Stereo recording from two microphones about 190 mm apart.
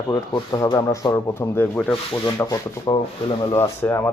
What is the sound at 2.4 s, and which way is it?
Sanding, 20° left (ahead or behind).